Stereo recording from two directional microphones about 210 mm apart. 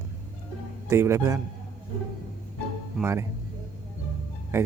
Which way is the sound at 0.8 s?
15° right (ahead or behind).